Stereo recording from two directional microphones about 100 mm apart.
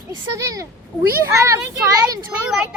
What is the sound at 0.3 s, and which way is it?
Speech, 30° right (ahead or behind).